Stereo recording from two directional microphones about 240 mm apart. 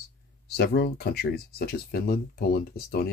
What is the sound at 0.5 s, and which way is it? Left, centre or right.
Speech, left.